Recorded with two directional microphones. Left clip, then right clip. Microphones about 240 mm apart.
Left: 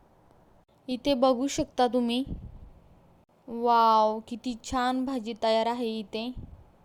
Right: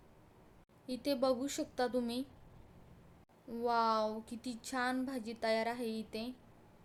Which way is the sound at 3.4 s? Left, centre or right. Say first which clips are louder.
Left 11 dB; left.